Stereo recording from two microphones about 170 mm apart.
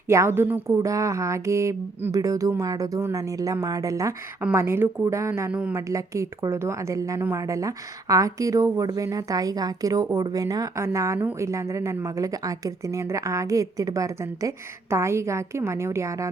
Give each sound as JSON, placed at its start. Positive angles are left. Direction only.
{"t": 0.1, "sound": "a woman's voice", "side_deg": -15}